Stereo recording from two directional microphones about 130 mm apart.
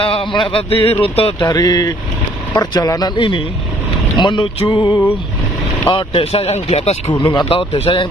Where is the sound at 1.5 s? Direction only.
30° left (ahead or behind); by 7.0 s 55° left (ahead or behind).